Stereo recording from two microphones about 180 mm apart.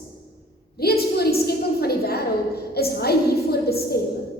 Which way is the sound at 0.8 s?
60° left (ahead or behind).